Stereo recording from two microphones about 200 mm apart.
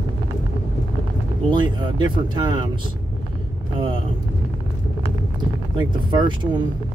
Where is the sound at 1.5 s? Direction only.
20° right (ahead or behind).